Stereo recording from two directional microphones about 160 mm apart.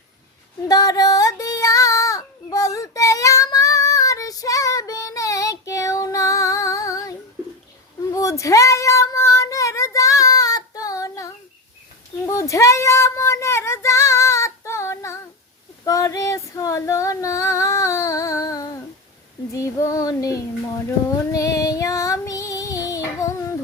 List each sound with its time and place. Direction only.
0.7 s child singing: 20° left (ahead or behind)
15.8 s female singing: 20° left (ahead or behind)
19.5 s child singing: 20° left (ahead or behind)
21.3 s music: 20° left (ahead or behind)